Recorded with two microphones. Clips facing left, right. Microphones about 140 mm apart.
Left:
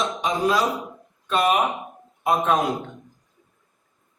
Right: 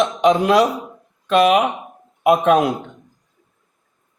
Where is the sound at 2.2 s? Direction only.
70° right (ahead or behind).